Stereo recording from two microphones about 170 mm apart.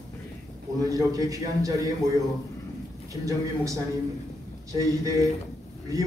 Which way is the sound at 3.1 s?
20° right (ahead or behind).